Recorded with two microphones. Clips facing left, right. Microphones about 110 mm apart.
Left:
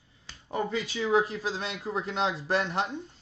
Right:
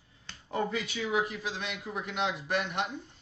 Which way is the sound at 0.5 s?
30° left (ahead or behind).